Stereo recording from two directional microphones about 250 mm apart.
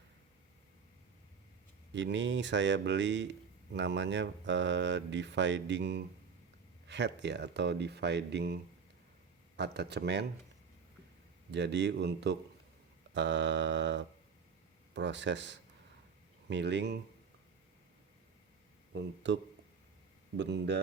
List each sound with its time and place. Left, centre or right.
1.9 s speech: right
11.5 s speech: right
18.9 s speech: right